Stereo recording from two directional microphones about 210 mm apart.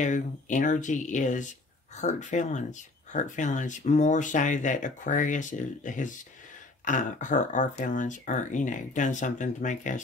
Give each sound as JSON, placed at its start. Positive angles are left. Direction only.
{"t": 0.0, "sound": "speech", "side_deg": 35}